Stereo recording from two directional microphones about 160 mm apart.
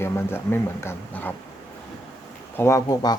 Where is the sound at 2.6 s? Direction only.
20° left (ahead or behind).